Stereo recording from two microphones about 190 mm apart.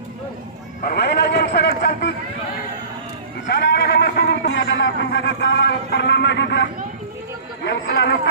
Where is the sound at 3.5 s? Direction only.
60° left (ahead or behind); by 5.1 s 85° left.